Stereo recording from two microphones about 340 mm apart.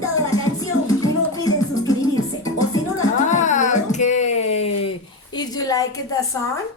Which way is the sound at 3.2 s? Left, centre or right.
Left.